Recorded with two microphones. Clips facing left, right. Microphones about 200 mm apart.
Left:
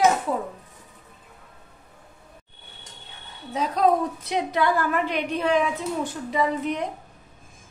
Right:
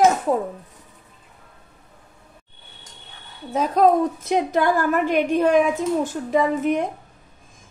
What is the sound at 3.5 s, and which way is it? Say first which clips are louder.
A woman's voice: right 4 dB; 50° right (ahead or behind).